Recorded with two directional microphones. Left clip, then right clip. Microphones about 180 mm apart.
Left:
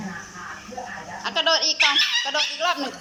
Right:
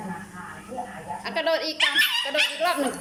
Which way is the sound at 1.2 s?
10° right (ahead or behind).